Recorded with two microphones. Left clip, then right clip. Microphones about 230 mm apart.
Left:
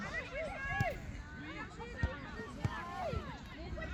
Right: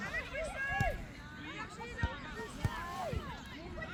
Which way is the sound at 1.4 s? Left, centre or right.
Right.